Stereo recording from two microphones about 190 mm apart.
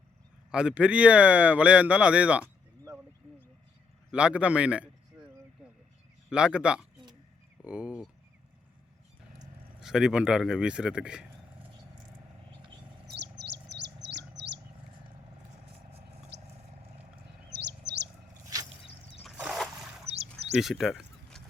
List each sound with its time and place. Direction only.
0.5 s speech: 5° right (ahead or behind)
4.1 s speech: 5° right (ahead or behind)
6.3 s speech: 5° right (ahead or behind)
9.8 s speech: 5° right (ahead or behind)
13.1 s chirp: 65° right (ahead or behind)
16.3 s a sound: 65° right (ahead or behind)
17.5 s chirp: 65° right (ahead or behind)
19.2 s a sound: centre (ahead or behind)
20.6 s speech: centre (ahead or behind)